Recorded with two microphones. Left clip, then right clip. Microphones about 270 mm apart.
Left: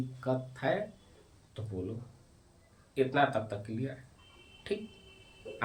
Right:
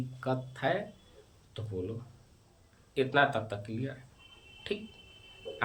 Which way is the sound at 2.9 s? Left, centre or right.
Centre.